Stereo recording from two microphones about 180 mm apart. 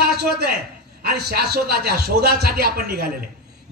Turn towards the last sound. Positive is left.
turn(degrees=-60)  # may be behind; listen again after turning